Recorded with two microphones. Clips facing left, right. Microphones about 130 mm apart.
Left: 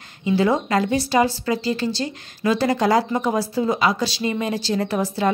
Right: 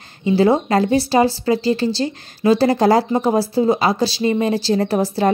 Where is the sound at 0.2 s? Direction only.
30° right (ahead or behind).